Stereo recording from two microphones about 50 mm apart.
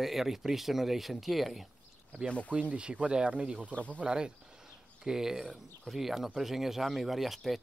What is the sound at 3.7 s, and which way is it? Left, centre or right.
Speech, left.